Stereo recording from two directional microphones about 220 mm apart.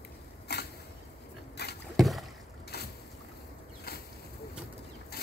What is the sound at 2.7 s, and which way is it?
Boat, 45° left (ahead or behind).